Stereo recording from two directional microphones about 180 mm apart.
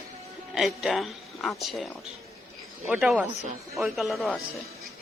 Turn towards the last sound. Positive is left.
turn(degrees=0)  # may be behind; listen again after turning